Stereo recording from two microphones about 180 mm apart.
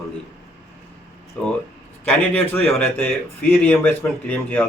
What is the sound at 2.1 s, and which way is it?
A man's voice, 5° left (ahead or behind).